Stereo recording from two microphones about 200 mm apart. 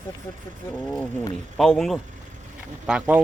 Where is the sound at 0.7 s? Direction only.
5° left (ahead or behind).